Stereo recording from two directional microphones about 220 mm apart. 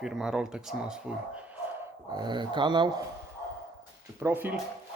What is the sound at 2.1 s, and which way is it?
Speech, 20° right (ahead or behind).